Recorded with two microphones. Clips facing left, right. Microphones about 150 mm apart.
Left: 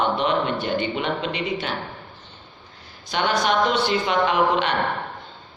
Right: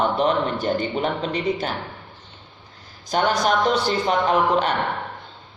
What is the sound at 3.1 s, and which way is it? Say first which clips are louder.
Speech: right 3 dB; 40° right (ahead or behind).